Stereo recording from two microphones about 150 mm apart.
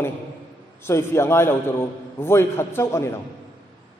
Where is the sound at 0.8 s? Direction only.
15° left (ahead or behind).